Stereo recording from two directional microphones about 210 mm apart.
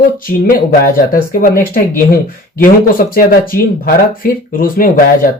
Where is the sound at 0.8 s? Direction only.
45° left (ahead or behind).